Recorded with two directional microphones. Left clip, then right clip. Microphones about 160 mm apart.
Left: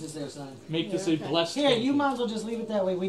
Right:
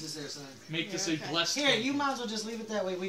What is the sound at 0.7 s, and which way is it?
Speech, 30° right (ahead or behind).